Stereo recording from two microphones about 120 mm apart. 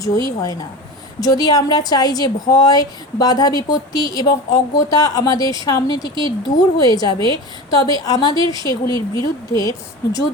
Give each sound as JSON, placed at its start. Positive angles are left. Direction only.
{"t": 0.0, "sound": "a woman's voice", "side_deg": 30}